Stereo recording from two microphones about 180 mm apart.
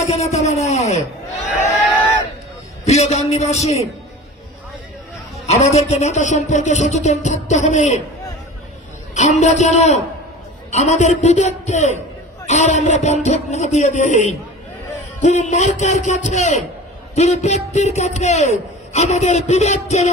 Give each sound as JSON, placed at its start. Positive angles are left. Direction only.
{"t": 0.1, "sound": "a man's voice", "side_deg": 35}
{"t": 2.8, "sound": "a man's voice", "side_deg": 35}
{"t": 5.5, "sound": "a man's voice", "side_deg": 35}
{"t": 9.1, "sound": "a man's voice", "side_deg": 40}